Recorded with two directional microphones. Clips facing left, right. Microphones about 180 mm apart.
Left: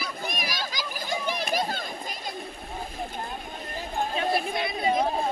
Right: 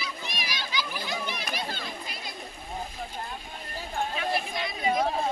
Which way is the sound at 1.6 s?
45° left (ahead or behind).